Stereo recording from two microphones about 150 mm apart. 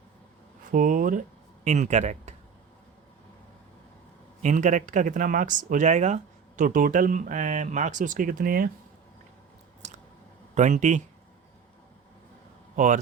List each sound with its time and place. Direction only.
0.7 s speech: 65° right (ahead or behind)
1.6 s speech: 50° right (ahead or behind)
4.4 s speech: 55° right (ahead or behind)
6.6 s speech: 65° right (ahead or behind)
10.5 s speech: 50° right (ahead or behind)
12.7 s speech: 55° right (ahead or behind)